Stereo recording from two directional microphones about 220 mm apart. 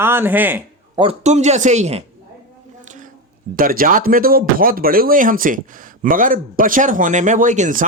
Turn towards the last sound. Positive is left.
turn(degrees=-35)  # may be behind; listen again after turning